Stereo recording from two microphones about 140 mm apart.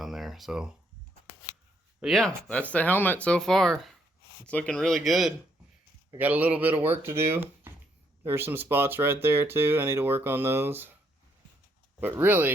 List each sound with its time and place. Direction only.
0.0 s a sound: centre (ahead or behind)
2.0 s speech: centre (ahead or behind)
6.1 s speech: 10° right (ahead or behind)
11.9 s speech: 15° right (ahead or behind)